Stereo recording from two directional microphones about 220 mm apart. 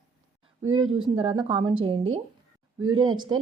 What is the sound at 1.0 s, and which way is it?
A woman's voice, 25° right (ahead or behind).